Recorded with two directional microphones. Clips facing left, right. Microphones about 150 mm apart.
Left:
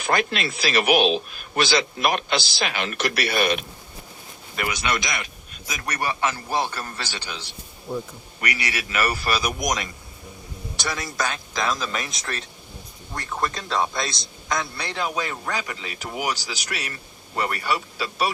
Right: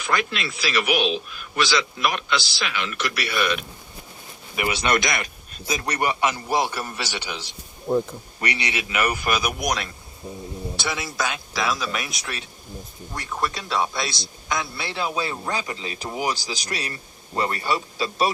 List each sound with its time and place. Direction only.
0.0 s a man's voice: 45° left (ahead or behind)
4.5 s speech: 20° right (ahead or behind)
4.9 s speech: 55° right (ahead or behind)
5.6 s a man's voice: 25° right (ahead or behind)
7.9 s speech: 50° right (ahead or behind)
8.4 s a man's voice: 25° right (ahead or behind); by 14.7 s centre (ahead or behind)
15.4 s speech: 30° right (ahead or behind)
16.4 s a man's voice: 40° right (ahead or behind)